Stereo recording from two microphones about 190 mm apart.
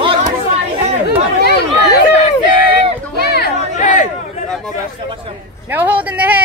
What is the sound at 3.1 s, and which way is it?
Chatter, 60° left (ahead or behind).